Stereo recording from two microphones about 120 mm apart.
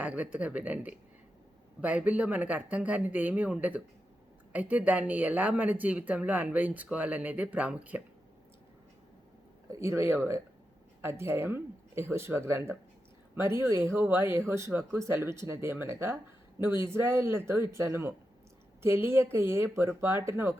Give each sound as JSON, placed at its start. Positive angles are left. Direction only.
{"t": 0.0, "sound": "speech", "side_deg": -10}
{"t": 9.6, "sound": "speech", "side_deg": -25}